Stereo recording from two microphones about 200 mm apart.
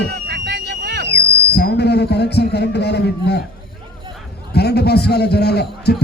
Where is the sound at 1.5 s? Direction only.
55° left (ahead or behind).